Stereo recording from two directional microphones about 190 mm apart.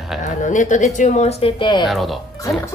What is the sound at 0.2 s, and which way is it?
Speech, 40° left (ahead or behind).